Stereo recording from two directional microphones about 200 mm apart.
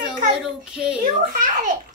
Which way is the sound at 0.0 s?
5° right (ahead or behind).